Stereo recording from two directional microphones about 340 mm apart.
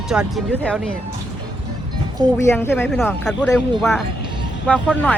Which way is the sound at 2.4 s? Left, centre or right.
Centre.